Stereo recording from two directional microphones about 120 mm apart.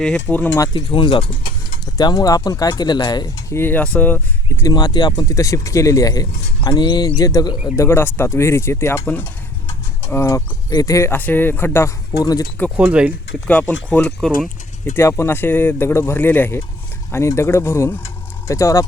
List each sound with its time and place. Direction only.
0.0 s speech: 10° left (ahead or behind)
0.9 s speech: 45° left (ahead or behind); by 4.6 s 15° left (ahead or behind)
4.6 s speech: 35° left (ahead or behind)
7.8 s speech: 20° left (ahead or behind)
12.2 s speech: 30° left (ahead or behind)
12.7 s speech: 10° right (ahead or behind)
13.5 s speech: 15° left (ahead or behind)
14.9 s speech: 25° left (ahead or behind)